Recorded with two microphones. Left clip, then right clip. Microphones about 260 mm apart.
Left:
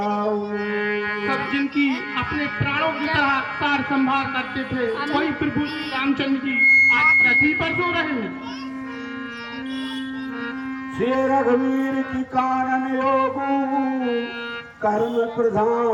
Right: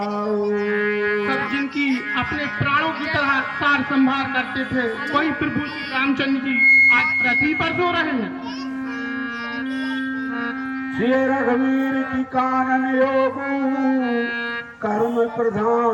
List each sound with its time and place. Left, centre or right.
0.7 s music: centre
11.0 s music: centre